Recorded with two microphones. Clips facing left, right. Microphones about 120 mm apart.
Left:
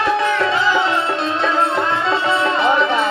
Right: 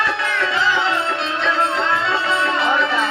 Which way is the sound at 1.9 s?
25° left (ahead or behind).